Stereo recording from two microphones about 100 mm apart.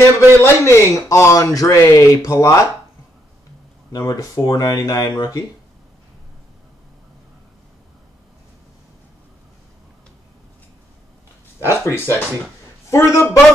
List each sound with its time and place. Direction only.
0.4 s speech: 30° left (ahead or behind)
4.0 s speech: 35° left (ahead or behind)
11.6 s speech: 25° left (ahead or behind)